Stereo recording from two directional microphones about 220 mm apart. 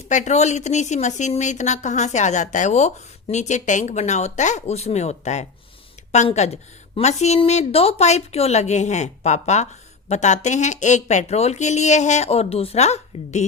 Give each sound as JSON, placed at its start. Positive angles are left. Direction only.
{"t": 0.1, "sound": "a woman's voice", "side_deg": 35}